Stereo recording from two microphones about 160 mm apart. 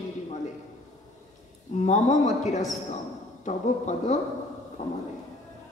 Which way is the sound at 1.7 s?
50° left (ahead or behind).